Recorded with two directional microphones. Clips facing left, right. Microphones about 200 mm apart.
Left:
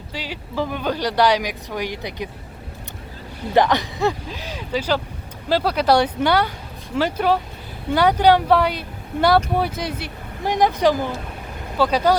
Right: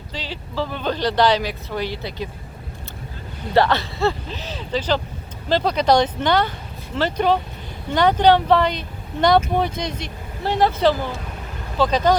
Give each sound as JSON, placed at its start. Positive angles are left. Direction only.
{"t": 0.1, "sound": "speech", "side_deg": 10}
{"t": 3.5, "sound": "speech", "side_deg": 15}